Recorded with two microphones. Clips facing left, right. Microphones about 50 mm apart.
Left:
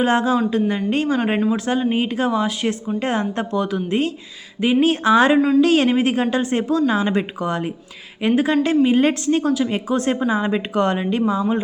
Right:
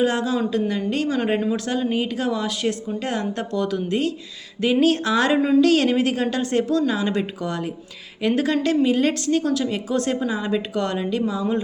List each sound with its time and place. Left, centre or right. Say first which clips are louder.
0.0 s a woman's voice: left 3 dB; left
8.3 s a woman's voice: left 3 dB; centre